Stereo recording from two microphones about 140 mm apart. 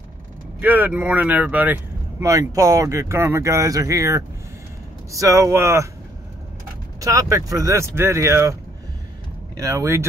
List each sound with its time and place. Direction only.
0.6 s speech: 15° right (ahead or behind)
7.0 s speech: 25° right (ahead or behind)
9.6 s speech: 25° right (ahead or behind)